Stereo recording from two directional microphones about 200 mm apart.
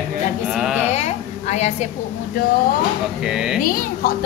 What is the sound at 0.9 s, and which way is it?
Speech, 35° left (ahead or behind).